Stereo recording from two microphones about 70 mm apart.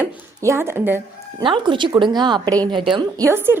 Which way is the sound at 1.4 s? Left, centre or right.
Right.